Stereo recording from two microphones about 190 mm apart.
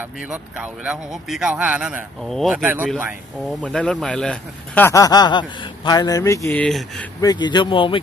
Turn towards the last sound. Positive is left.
turn(degrees=25)  # may be behind; listen again after turning